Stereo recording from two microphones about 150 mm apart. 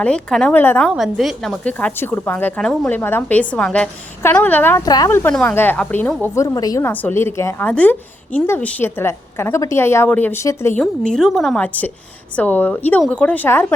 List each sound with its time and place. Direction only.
0.0 s a woman's voice: 5° left (ahead or behind)
0.9 s a woman's voice: centre (ahead or behind)
6.2 s a woman's voice: 20° left (ahead or behind)
11.0 s a woman's voice: 5° left (ahead or behind)